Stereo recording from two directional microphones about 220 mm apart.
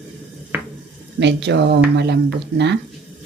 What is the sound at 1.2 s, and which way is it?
Speech, 50° right (ahead or behind).